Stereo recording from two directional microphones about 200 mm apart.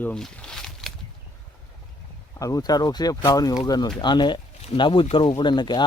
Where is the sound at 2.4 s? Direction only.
15° left (ahead or behind).